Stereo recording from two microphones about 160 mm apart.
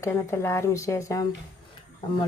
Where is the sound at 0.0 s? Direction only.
15° left (ahead or behind).